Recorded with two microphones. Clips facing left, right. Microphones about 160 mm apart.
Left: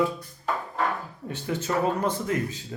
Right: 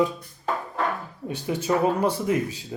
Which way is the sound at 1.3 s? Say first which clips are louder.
Right 4 dB; 15° right (ahead or behind).